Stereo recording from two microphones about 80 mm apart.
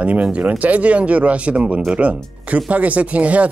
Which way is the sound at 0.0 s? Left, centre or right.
Centre.